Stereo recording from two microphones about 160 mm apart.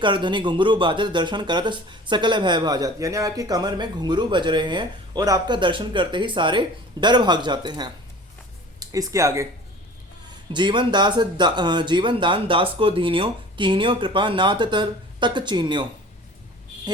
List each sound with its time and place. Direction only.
0.0 s speech: 30° right (ahead or behind)
10.5 s speech: 30° right (ahead or behind)